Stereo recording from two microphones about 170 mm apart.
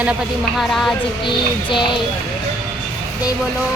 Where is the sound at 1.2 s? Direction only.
30° left (ahead or behind).